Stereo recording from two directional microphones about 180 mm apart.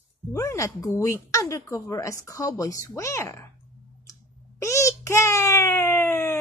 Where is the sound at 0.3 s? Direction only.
15° left (ahead or behind).